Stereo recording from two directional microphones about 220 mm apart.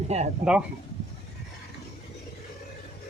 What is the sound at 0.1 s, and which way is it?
Speech, 30° right (ahead or behind).